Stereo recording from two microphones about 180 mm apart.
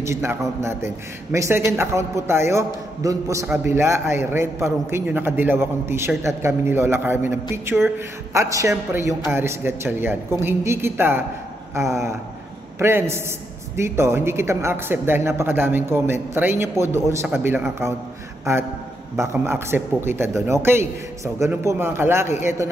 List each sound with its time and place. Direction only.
0.0 s a man's voice: 15° right (ahead or behind)